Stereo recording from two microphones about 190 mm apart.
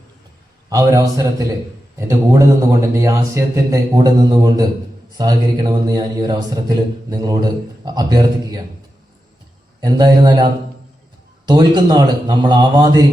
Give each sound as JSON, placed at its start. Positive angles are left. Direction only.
{"t": 0.7, "sound": "a man's voice", "side_deg": -20}
{"t": 9.8, "sound": "a man's voice", "side_deg": -20}